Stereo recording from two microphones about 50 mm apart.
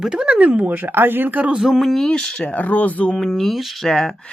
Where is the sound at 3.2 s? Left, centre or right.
Centre.